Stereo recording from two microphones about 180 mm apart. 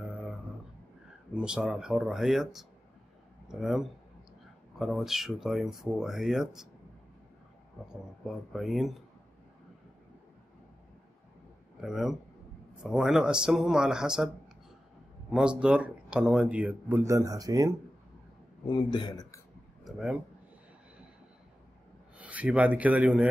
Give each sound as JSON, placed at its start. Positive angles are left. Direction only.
{"t": 0.1, "sound": "a sound", "side_deg": -5}
{"t": 1.3, "sound": "speech", "side_deg": -5}
{"t": 3.4, "sound": "speech", "side_deg": 0}
{"t": 7.9, "sound": "speech", "side_deg": 0}
{"t": 11.8, "sound": "speech", "side_deg": 0}
{"t": 15.3, "sound": "speech", "side_deg": -5}
{"t": 18.7, "sound": "a man's voice", "side_deg": 25}
{"t": 19.8, "sound": "speech", "side_deg": 0}
{"t": 22.2, "sound": "speech", "side_deg": -5}